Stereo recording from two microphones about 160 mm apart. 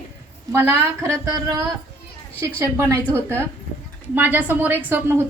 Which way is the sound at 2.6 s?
15° right (ahead or behind).